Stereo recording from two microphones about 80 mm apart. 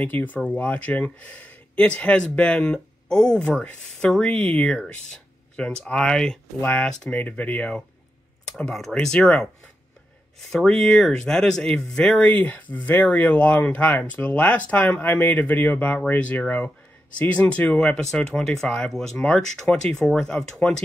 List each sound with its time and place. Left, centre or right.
0.0 s speech: left
6.6 s speech: left; by 9.3 s centre
10.5 s speech: centre